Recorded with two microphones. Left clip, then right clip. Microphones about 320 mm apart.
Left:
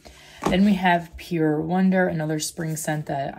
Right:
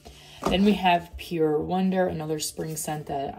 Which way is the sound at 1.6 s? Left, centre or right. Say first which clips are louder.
Left 3 dB; left.